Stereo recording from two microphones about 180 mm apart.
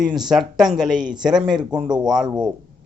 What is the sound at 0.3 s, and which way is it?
Speech, centre (ahead or behind).